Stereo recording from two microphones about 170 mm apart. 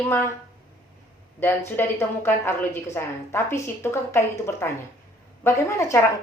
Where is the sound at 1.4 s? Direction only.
15° left (ahead or behind).